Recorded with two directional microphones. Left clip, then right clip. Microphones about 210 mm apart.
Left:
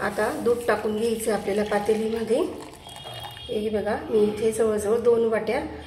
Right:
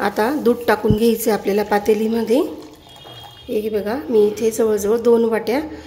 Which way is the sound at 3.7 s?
50° right (ahead or behind).